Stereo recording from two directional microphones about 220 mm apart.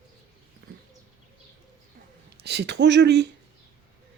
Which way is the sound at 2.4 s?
50° right (ahead or behind).